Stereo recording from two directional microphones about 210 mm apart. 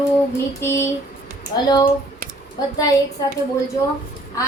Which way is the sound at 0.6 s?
10° left (ahead or behind).